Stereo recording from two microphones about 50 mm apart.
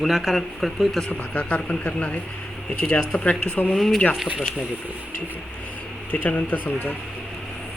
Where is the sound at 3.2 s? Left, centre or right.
Left.